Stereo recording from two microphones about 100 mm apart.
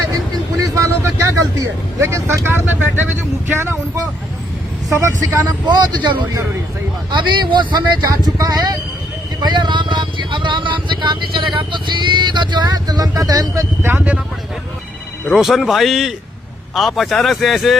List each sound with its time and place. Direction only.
0.6 s vehicle: 30° right (ahead or behind)
2.0 s speech: 25° right (ahead or behind)
4.9 s speech: 25° right (ahead or behind)
5.6 s speech: 50° right (ahead or behind); by 14.0 s 25° right (ahead or behind)
15.3 s speech: 5° right (ahead or behind)